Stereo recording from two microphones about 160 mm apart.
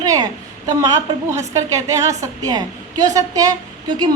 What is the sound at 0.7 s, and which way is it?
A woman's voice, 20° right (ahead or behind).